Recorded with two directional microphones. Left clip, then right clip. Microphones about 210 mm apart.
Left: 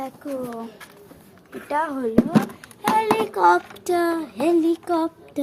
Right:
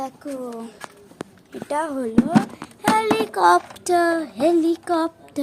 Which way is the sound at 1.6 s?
15° right (ahead or behind).